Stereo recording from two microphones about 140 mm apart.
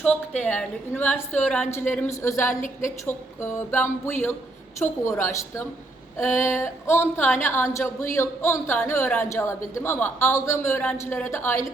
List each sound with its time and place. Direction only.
0.0 s a man's voice: 10° left (ahead or behind)
1.5 s speech: 5° left (ahead or behind)
1.9 s a man's voice: 15° left (ahead or behind)